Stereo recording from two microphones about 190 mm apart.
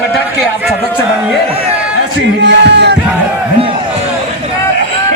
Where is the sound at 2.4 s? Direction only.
65° right (ahead or behind).